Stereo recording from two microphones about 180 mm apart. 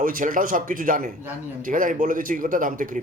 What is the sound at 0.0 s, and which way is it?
Speech, 50° right (ahead or behind).